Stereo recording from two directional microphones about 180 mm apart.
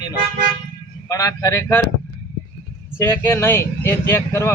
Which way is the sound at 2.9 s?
10° left (ahead or behind).